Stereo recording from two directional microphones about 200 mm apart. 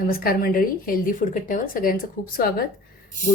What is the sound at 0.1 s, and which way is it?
Speech, 50° left (ahead or behind).